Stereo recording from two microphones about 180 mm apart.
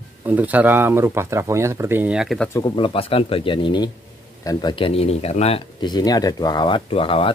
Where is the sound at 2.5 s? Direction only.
25° left (ahead or behind).